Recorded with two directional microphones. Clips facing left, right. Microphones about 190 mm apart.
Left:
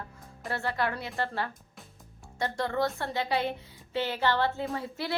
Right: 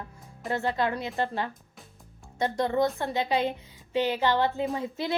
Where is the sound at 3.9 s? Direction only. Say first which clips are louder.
Right 3 dB; 15° right (ahead or behind).